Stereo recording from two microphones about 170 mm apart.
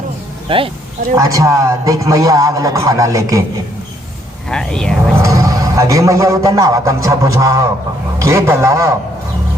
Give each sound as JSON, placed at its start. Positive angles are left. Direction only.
{"t": 0.4, "sound": "speech", "side_deg": -30}
{"t": 1.1, "sound": "a man's voice", "side_deg": -20}
{"t": 4.4, "sound": "speech", "side_deg": 5}
{"t": 5.2, "sound": "a man's voice", "side_deg": -20}